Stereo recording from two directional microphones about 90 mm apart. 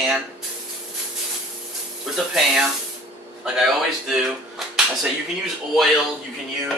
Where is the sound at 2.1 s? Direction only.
5° right (ahead or behind).